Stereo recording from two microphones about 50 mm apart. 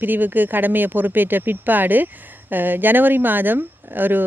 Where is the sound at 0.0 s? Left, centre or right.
Right.